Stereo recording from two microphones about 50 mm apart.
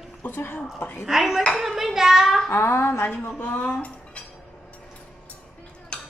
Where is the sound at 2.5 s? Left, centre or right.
Left.